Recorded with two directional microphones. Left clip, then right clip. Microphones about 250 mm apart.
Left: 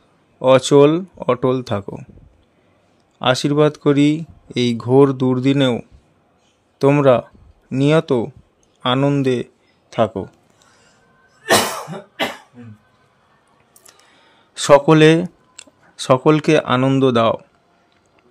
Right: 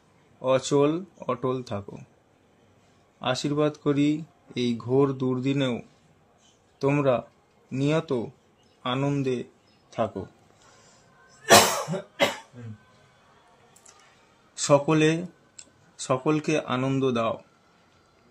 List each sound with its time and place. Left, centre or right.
0.4 s speech: left
3.2 s a man's voice: left
14.5 s speech: left